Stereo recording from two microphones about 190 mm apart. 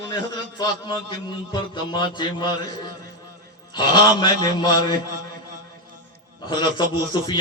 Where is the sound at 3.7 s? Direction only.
25° left (ahead or behind).